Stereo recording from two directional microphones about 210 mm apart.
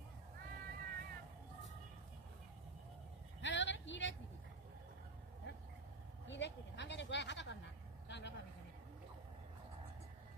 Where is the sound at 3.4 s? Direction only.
60° left (ahead or behind).